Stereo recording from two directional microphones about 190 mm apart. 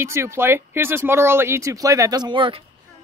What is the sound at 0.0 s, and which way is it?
Speech, 15° right (ahead or behind).